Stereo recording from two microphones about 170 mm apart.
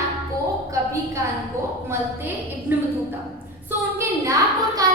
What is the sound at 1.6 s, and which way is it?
A woman's voice, 15° right (ahead or behind).